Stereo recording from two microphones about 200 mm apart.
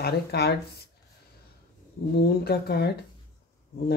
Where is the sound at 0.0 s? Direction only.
55° left (ahead or behind).